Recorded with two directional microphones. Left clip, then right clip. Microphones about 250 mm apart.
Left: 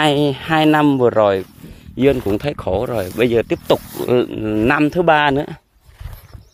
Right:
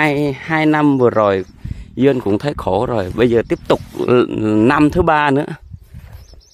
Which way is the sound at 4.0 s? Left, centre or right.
Right.